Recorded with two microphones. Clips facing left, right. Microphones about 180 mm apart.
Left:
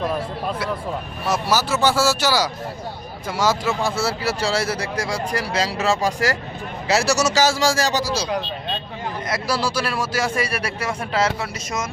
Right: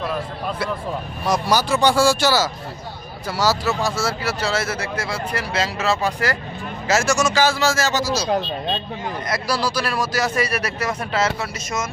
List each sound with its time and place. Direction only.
1.3 s speech: 5° left (ahead or behind)
3.8 s speech: 35° left (ahead or behind)
9.3 s speech: 25° left (ahead or behind)